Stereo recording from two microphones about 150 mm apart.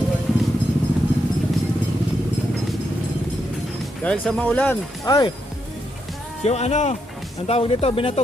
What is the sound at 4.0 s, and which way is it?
Speech, 5° left (ahead or behind).